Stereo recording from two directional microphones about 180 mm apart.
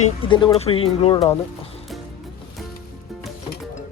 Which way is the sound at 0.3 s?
25° left (ahead or behind).